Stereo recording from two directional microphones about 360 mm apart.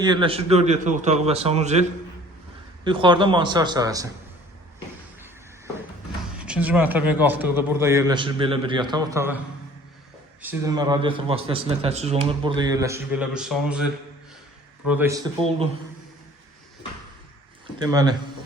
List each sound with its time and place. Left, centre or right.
0.0 s a man's voice: centre
2.8 s a man's voice: centre
6.3 s a man's voice: centre
10.4 s a man's voice: centre
17.7 s a man's voice: centre